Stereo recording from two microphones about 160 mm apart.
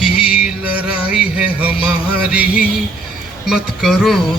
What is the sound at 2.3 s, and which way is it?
Music, 10° right (ahead or behind).